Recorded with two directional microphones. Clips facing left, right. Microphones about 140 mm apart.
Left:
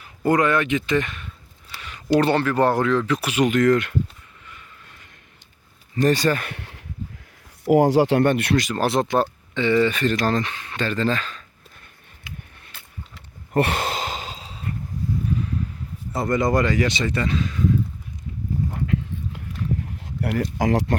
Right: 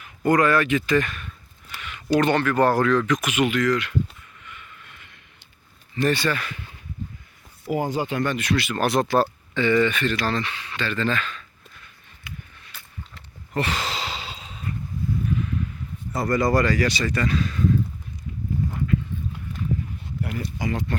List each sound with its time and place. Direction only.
0.0 s speech: 25° left (ahead or behind)
1.7 s speech: 35° left (ahead or behind); by 3.9 s 50° left (ahead or behind)
4.4 s vehicle: 35° left (ahead or behind)
6.0 s speech: 40° left (ahead or behind)
6.5 s a sound: 70° left (ahead or behind)
7.6 s speech: 80° left; by 8.5 s 60° left (ahead or behind)
8.5 s speech: 35° left (ahead or behind)
13.5 s sigh: 55° left (ahead or behind); by 14.7 s 35° left (ahead or behind)
15.3 s a sound: 35° left (ahead or behind)
16.1 s speech: 20° left (ahead or behind)
19.8 s a sound: 80° left